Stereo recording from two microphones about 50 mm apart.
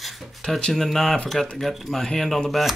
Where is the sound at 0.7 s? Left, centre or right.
Centre.